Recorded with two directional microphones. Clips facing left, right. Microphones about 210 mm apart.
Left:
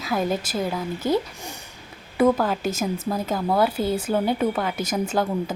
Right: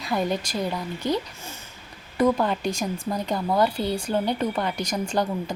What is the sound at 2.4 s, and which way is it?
Speech, 5° left (ahead or behind).